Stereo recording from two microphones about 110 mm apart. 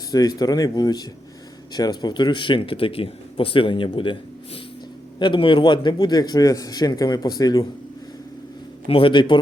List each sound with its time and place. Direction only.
0.1 s a man's voice: 35° left (ahead or behind)
8.9 s speech: 55° left (ahead or behind)